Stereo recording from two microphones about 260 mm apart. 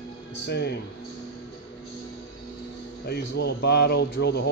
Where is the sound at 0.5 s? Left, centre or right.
Left.